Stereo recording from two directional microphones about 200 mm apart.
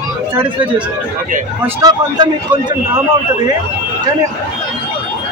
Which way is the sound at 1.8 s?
20° right (ahead or behind).